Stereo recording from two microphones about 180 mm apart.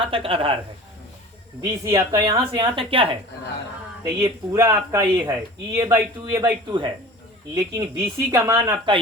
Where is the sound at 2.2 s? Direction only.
30° right (ahead or behind).